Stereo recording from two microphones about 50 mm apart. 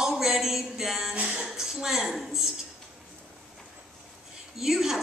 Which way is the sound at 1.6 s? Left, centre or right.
Centre.